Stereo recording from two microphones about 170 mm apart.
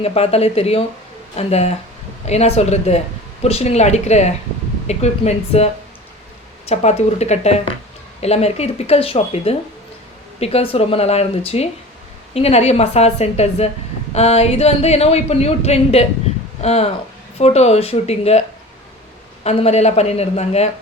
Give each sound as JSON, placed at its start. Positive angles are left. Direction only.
{"t": 0.0, "sound": "speech", "side_deg": 35}
{"t": 19.5, "sound": "speech", "side_deg": 40}